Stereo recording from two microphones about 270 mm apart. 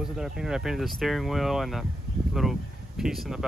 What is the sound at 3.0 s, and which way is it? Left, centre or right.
Speech, centre.